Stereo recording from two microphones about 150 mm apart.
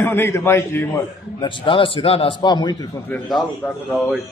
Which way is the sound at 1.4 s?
35° left (ahead or behind).